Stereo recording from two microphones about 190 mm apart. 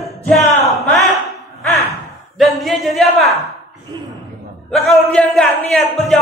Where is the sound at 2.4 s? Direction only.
Centre (ahead or behind).